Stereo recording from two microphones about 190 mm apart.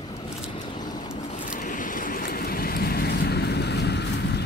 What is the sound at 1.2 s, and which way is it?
Waves, 40° left (ahead or behind).